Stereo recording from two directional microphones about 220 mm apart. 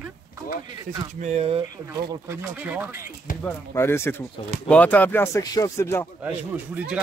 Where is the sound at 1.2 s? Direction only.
30° right (ahead or behind).